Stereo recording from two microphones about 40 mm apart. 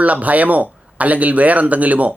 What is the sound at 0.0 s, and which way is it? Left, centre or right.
Speech, right.